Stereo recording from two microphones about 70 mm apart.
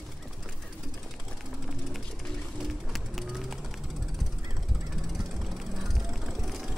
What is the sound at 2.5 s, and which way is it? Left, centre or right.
Bird, centre.